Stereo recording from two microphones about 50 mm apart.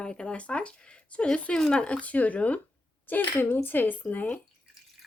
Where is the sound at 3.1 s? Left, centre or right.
Left.